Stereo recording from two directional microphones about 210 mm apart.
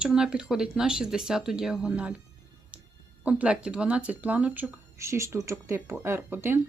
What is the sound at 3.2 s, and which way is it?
Speech, 5° right (ahead or behind).